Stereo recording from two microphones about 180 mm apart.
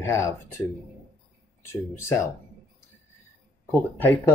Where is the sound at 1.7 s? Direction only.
15° left (ahead or behind).